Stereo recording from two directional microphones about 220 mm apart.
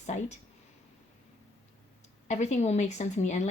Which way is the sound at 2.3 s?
30° left (ahead or behind).